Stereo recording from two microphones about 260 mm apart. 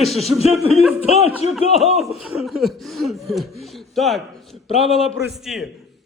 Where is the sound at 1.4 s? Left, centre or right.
Left.